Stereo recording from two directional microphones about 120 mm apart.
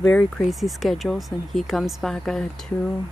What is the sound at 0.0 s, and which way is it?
Speech, 5° left (ahead or behind).